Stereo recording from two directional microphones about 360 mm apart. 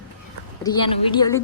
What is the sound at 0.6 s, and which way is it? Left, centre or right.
Speech, centre.